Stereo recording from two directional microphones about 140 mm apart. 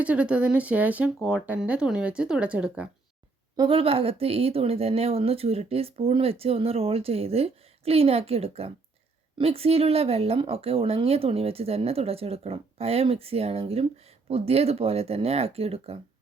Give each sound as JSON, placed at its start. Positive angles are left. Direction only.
{"t": 0.0, "sound": "speech", "side_deg": -10}
{"t": 3.6, "sound": "speech", "side_deg": -40}